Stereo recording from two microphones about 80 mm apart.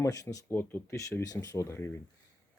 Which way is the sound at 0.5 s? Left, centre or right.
Left.